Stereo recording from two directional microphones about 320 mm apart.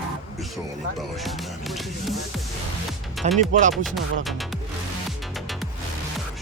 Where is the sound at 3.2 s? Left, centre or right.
Right.